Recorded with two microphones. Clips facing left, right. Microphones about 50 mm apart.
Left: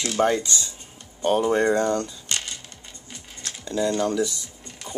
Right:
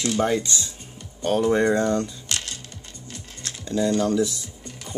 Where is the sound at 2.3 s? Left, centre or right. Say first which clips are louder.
Even; centre.